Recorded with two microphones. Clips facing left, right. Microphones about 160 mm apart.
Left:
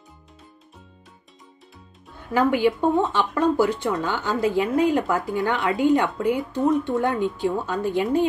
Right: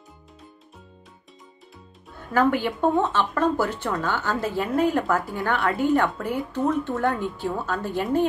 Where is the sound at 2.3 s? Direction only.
15° left (ahead or behind).